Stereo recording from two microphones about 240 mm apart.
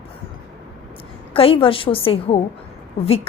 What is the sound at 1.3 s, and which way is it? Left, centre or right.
A woman's voice, left.